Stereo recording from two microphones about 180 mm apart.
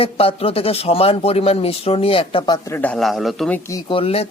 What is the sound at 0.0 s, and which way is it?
Speech, 35° left (ahead or behind).